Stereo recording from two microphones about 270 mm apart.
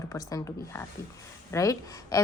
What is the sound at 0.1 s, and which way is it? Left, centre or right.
A woman's voice, centre.